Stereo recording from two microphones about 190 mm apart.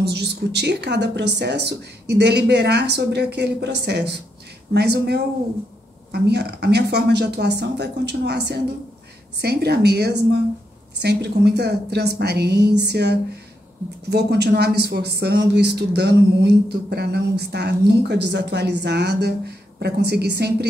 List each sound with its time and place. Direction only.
0.0 s speech: 60° right (ahead or behind)